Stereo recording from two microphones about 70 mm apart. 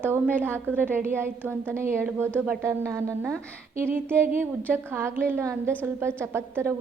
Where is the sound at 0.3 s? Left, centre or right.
Right.